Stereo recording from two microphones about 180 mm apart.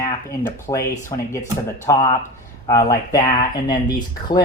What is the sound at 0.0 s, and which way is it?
Speech, 15° left (ahead or behind).